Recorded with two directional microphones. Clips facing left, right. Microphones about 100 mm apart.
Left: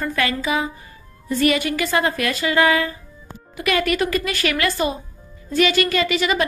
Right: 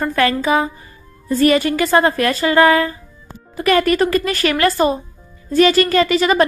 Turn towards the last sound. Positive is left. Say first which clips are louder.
# right 6 dB
turn(degrees=-40)  # may be behind; listen again after turning